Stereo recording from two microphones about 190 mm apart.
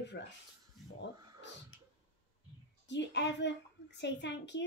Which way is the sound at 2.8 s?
65° left (ahead or behind).